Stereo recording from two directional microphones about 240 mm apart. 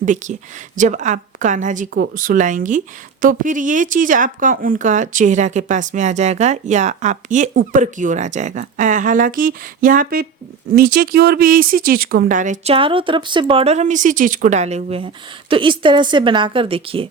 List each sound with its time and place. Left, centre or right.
0.0 s a woman's voice: right